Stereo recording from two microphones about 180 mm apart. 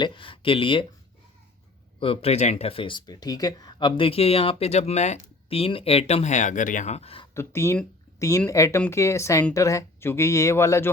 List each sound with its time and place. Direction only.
0.0 s speech: 25° left (ahead or behind)
2.0 s speech: 30° left (ahead or behind)
7.3 s speech: 15° left (ahead or behind)